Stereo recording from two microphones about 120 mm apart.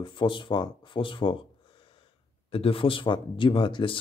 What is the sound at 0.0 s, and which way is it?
Speech, 40° left (ahead or behind).